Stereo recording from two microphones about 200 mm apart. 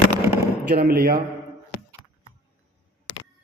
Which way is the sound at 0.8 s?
50° right (ahead or behind).